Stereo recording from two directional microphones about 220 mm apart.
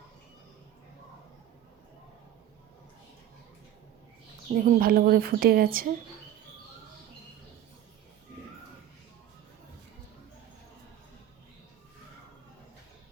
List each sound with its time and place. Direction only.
4.5 s speech: 40° right (ahead or behind)